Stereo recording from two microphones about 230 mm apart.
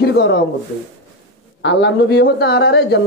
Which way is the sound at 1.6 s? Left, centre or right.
Left.